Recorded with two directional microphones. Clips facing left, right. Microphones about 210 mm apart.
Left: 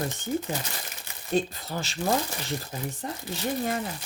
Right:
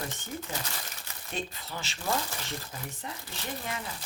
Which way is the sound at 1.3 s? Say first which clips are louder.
Left 10 dB; 40° left (ahead or behind).